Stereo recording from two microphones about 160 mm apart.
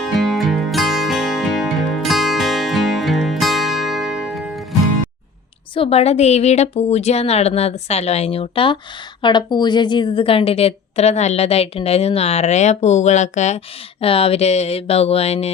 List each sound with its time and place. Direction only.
0.0 s music: centre (ahead or behind)
5.7 s a woman's voice: 35° left (ahead or behind)